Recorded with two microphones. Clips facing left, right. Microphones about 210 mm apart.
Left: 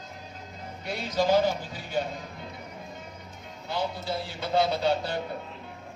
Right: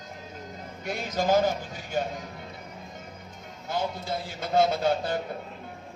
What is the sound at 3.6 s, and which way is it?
A man's voice, 45° right (ahead or behind).